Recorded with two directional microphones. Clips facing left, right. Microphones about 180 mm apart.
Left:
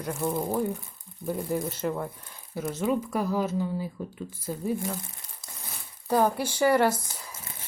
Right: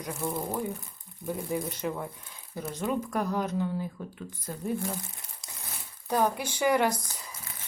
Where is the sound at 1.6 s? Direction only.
15° right (ahead or behind).